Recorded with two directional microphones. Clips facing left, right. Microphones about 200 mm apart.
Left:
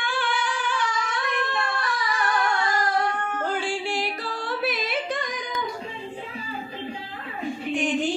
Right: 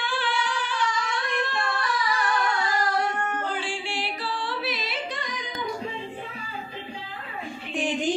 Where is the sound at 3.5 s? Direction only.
45° left (ahead or behind).